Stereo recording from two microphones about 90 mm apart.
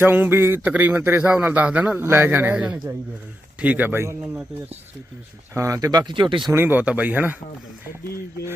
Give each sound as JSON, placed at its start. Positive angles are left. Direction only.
{"t": 0.0, "sound": "a man's voice", "side_deg": -25}
{"t": 2.0, "sound": "a man's voice", "side_deg": -25}
{"t": 5.5, "sound": "speech", "side_deg": -35}
{"t": 6.1, "sound": "speech", "side_deg": -60}
{"t": 6.5, "sound": "a man's voice", "side_deg": -25}